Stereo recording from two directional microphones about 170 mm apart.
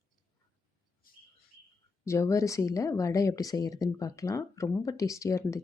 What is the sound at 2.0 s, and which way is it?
Speech, 15° left (ahead or behind).